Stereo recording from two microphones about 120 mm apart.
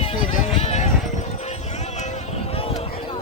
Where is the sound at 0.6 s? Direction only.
65° left (ahead or behind).